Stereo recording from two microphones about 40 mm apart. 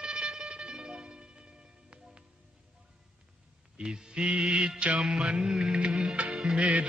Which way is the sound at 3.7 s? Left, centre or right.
Centre.